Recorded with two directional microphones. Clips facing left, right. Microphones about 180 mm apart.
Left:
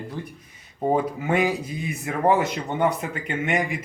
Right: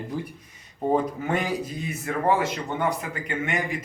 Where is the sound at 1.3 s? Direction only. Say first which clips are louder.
Left 6 dB; 10° left (ahead or behind).